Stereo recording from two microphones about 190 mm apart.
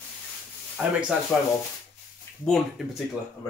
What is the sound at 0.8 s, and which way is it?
Speech, 5° right (ahead or behind).